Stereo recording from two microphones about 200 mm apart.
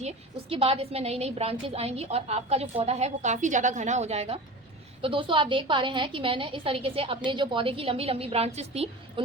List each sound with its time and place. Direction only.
0.5 s a woman's voice: 30° right (ahead or behind)